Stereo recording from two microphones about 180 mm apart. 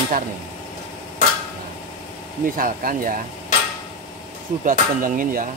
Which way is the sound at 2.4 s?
50° right (ahead or behind).